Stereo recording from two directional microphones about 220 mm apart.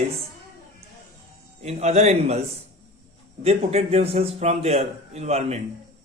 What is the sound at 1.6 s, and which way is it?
Speech, 30° right (ahead or behind).